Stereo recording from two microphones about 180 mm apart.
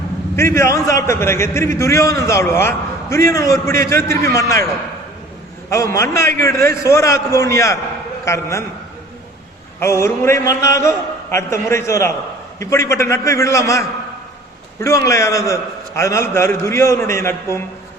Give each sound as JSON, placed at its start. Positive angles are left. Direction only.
{"t": 0.3, "sound": "a man's voice", "side_deg": 15}
{"t": 5.7, "sound": "a man's voice", "side_deg": 15}
{"t": 9.8, "sound": "a man's voice", "side_deg": 15}